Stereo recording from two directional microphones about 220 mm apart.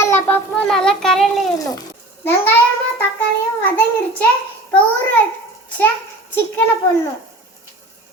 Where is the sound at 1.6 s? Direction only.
15° left (ahead or behind).